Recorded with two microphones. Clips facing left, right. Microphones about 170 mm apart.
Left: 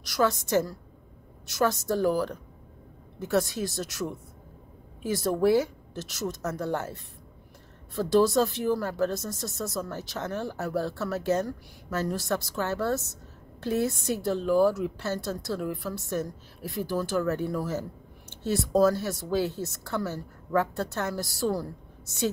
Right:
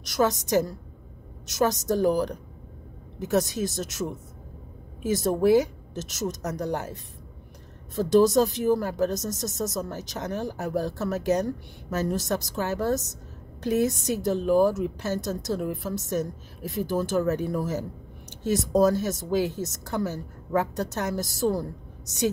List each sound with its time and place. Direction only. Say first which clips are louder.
0.0 s a woman's voice: right 2 dB; 20° right (ahead or behind)